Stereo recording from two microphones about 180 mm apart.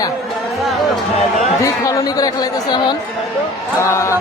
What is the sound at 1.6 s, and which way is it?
Speech, 20° left (ahead or behind).